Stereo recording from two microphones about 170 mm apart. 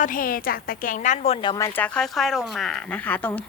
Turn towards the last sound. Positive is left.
turn(degrees=10)  # may be behind; listen again after turning